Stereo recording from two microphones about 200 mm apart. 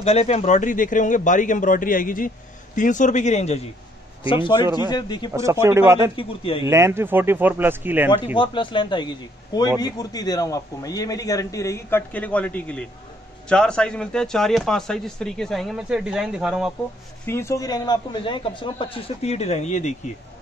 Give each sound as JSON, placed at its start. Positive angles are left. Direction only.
{"t": 0.0, "sound": "a man's voice", "side_deg": 30}
{"t": 5.3, "sound": "speech", "side_deg": -15}
{"t": 6.1, "sound": "a man's voice", "side_deg": 25}
{"t": 6.6, "sound": "speech", "side_deg": -15}
{"t": 8.4, "sound": "a man's voice", "side_deg": 25}
{"t": 17.3, "sound": "a man's voice", "side_deg": 15}